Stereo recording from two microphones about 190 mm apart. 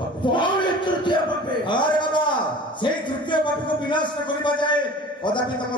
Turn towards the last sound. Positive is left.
turn(degrees=25)  # may be behind; listen again after turning